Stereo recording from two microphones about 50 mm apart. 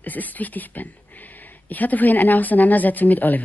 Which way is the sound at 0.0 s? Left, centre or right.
Left.